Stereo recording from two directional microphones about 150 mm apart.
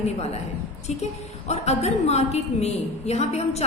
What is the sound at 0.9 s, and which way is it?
A woman's voice, 50° left (ahead or behind).